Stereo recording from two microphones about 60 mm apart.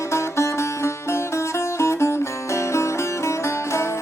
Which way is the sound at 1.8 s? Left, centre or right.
Left.